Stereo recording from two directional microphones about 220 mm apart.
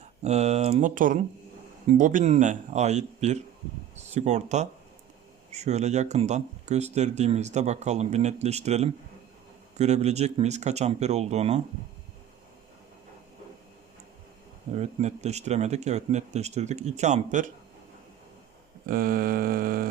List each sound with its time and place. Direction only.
0.0 s speech: 30° right (ahead or behind)
14.7 s speech: 30° right (ahead or behind)
18.9 s speech: 40° right (ahead or behind)